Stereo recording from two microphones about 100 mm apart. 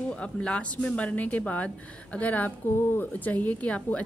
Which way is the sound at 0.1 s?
10° left (ahead or behind).